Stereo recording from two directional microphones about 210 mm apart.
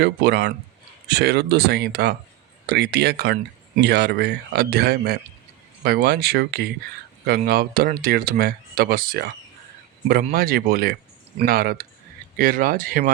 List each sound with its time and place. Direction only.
0.0 s speech: 50° right (ahead or behind)
10.3 s speech: 45° right (ahead or behind)